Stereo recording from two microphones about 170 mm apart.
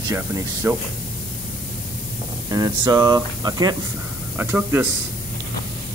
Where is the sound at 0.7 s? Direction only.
15° right (ahead or behind).